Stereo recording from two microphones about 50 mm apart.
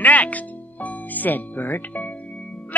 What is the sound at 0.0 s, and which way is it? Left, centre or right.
Music, left.